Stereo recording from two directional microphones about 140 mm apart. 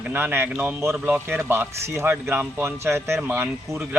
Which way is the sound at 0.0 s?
15° right (ahead or behind).